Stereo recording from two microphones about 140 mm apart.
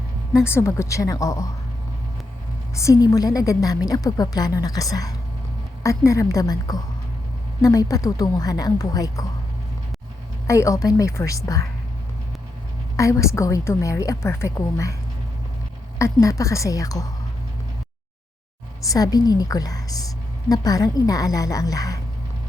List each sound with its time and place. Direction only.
0.3 s a woman's voice: 20° left (ahead or behind)
2.7 s a woman's voice: 25° left (ahead or behind)
10.4 s a woman's voice: 20° left (ahead or behind)
13.0 s a woman's voice: 20° left (ahead or behind)
16.0 s a woman's voice: 20° left (ahead or behind)
18.9 s a woman's voice: 25° left (ahead or behind)